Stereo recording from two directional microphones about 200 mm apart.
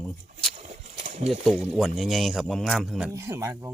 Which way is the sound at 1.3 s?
Centre (ahead or behind).